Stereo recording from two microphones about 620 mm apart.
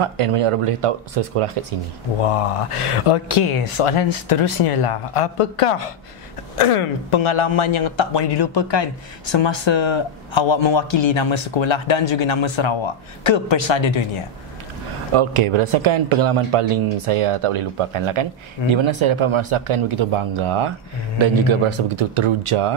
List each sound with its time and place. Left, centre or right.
0.0 s speech: right
3.1 s speech: left
15.1 s speech: right